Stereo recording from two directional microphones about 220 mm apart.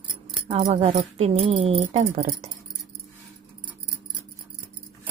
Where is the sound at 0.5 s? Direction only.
30° right (ahead or behind).